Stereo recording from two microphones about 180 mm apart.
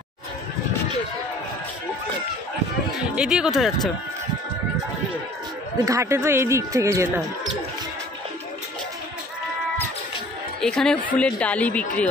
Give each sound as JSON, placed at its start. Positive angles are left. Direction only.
{"t": 3.2, "sound": "speech", "side_deg": -5}
{"t": 5.8, "sound": "speech", "side_deg": -15}
{"t": 10.6, "sound": "a woman's voice", "side_deg": 5}